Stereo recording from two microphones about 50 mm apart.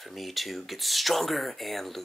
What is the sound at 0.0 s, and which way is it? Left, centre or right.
Speech, centre.